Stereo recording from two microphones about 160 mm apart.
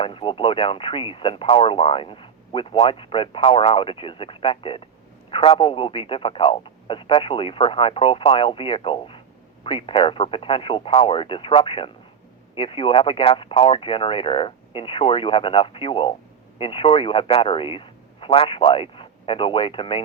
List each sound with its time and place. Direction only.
0.0 s speech: 30° left (ahead or behind)